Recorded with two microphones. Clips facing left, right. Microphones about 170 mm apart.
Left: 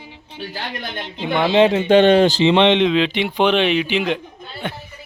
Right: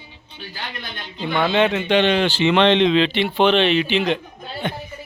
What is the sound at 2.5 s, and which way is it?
Speech, 20° left (ahead or behind).